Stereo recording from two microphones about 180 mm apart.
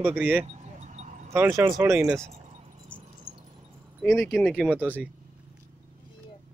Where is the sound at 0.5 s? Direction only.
40° right (ahead or behind).